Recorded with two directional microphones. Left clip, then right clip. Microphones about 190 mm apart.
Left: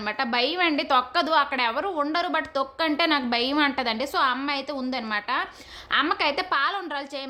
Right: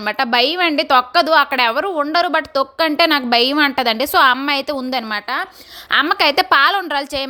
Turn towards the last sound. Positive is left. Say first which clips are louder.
# right 11 dB
turn(degrees=-40)  # may be behind; listen again after turning